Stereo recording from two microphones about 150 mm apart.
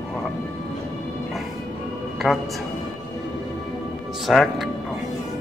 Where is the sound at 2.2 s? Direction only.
5° right (ahead or behind).